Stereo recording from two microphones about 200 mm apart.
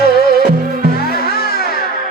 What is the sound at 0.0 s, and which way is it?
Music, 50° left (ahead or behind).